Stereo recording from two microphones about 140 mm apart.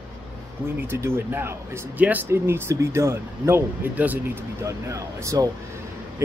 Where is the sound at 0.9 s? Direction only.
15° right (ahead or behind).